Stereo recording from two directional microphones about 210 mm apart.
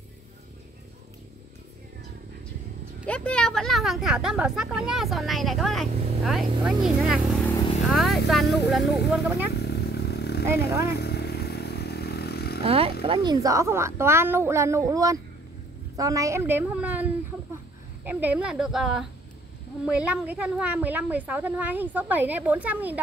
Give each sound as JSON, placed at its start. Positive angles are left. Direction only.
{"t": 3.1, "sound": "speech", "side_deg": 5}
{"t": 9.6, "sound": "vehicle", "side_deg": 50}
{"t": 12.6, "sound": "a woman's voice", "side_deg": -25}